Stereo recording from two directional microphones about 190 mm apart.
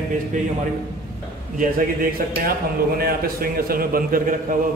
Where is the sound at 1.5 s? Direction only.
50° right (ahead or behind).